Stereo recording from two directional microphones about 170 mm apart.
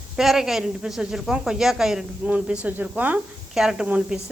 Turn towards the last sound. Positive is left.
turn(degrees=-5)  # may be behind; listen again after turning